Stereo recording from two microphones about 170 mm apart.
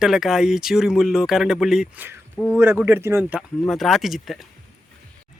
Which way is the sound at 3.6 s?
Centre (ahead or behind).